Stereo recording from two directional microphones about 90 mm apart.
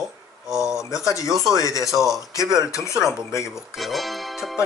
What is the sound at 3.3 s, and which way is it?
Speech, 35° left (ahead or behind).